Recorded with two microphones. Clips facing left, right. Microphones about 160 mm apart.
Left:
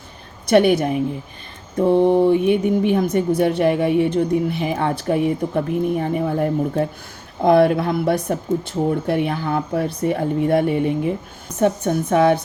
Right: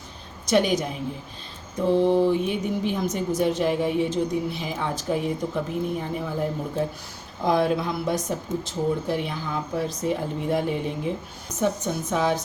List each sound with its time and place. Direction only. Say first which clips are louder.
0.4 s speech: left 7 dB; 60° left (ahead or behind)